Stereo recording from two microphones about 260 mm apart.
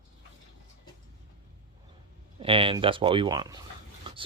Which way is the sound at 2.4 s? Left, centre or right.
Right.